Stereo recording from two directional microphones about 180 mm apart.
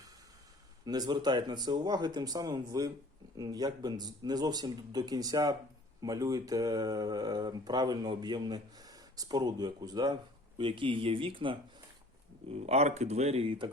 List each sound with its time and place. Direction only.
0.9 s speech: 20° right (ahead or behind)